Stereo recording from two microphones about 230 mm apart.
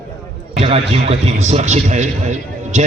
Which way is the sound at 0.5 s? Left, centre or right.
Right.